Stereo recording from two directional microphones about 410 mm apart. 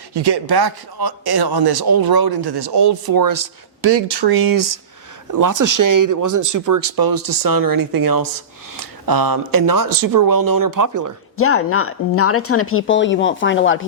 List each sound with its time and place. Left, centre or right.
0.1 s a man's voice: right
11.3 s speech: left